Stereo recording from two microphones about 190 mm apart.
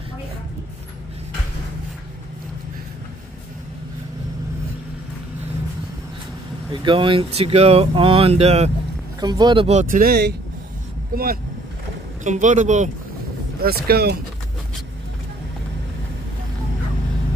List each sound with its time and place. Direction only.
6.7 s speech: 25° right (ahead or behind)
9.2 s speech: 20° right (ahead or behind); by 12.9 s 40° right (ahead or behind)
13.6 s speech: 55° right (ahead or behind)